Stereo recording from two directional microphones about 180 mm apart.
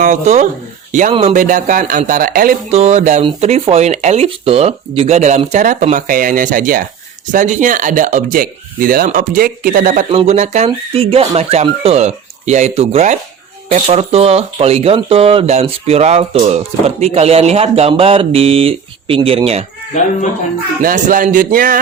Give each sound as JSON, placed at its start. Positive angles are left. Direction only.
{"t": 0.0, "sound": "speech", "side_deg": -40}
{"t": 2.6, "sound": "speech", "side_deg": -35}
{"t": 10.1, "sound": "speech", "side_deg": -35}
{"t": 20.8, "sound": "speech", "side_deg": -50}